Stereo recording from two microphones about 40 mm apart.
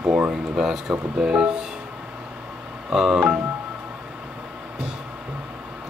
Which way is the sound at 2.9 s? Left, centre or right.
Centre.